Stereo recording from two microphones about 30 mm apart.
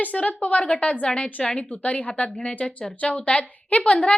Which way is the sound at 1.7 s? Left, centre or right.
Left.